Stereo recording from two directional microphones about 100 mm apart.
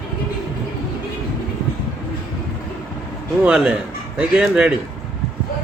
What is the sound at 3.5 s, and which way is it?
Speech, 10° right (ahead or behind).